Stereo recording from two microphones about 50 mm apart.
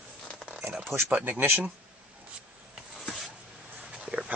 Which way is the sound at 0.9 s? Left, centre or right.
Centre.